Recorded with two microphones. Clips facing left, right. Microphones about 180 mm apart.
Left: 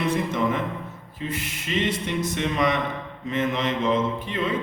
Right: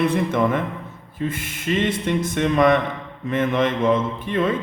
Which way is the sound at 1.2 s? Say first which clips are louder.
Right 5 dB; 50° right (ahead or behind).